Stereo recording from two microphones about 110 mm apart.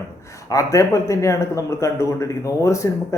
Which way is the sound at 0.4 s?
30° left (ahead or behind).